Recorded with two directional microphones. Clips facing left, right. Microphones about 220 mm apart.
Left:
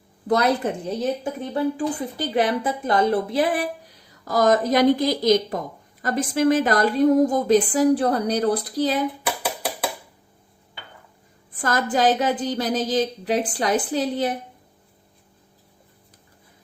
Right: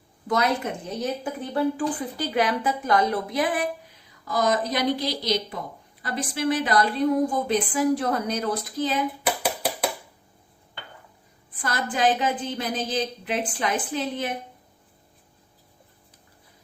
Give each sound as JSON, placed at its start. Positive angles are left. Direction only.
{"t": 0.3, "sound": "a woman's voice", "side_deg": 35}
{"t": 11.6, "sound": "a woman's voice", "side_deg": 40}